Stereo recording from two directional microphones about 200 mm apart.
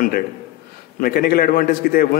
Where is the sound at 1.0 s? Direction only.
50° left (ahead or behind).